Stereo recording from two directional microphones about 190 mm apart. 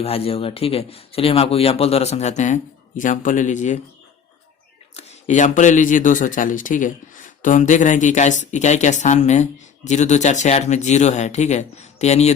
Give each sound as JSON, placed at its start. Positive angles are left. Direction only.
{"t": 0.0, "sound": "speech", "side_deg": 30}
{"t": 4.9, "sound": "speech", "side_deg": 35}